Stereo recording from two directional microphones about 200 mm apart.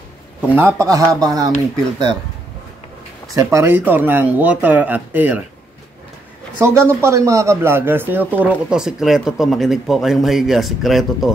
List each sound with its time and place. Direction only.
0.6 s speech: 15° right (ahead or behind)
3.3 s speech: 10° right (ahead or behind)
6.6 s a man's voice: 15° right (ahead or behind)